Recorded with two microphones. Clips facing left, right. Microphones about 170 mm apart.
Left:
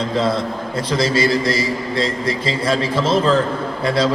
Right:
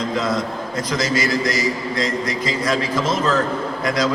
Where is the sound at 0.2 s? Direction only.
30° left (ahead or behind).